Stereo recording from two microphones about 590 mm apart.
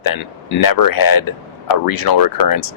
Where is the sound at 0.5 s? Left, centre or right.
Left.